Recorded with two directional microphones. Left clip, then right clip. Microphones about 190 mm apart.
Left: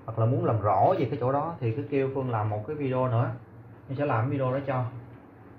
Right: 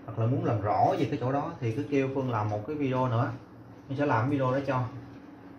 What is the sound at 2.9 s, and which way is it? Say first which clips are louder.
Speech: left 2 dB; 15° right (ahead or behind).